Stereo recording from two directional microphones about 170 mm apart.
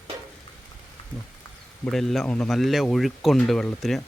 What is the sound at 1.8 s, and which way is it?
Speech, centre (ahead or behind).